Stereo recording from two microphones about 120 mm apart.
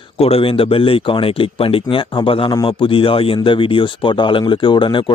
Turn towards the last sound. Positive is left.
turn(degrees=45)  # may be behind; listen again after turning